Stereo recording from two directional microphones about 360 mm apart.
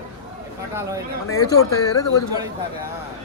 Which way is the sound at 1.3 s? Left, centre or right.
Left.